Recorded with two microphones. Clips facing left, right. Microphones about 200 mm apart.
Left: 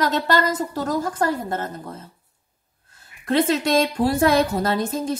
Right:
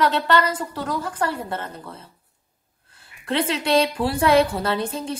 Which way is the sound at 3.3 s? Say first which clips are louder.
Left 3 dB; 45° left (ahead or behind).